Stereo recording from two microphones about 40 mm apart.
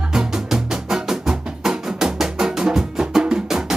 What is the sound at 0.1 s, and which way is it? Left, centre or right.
Music, centre.